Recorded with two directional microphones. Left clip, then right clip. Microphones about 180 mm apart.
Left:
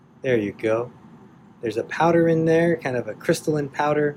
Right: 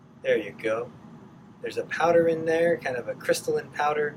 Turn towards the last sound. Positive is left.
turn(degrees=35)  # may be behind; listen again after turning